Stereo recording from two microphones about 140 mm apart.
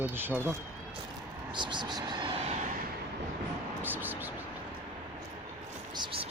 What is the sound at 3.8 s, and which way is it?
Vehicle, 15° right (ahead or behind).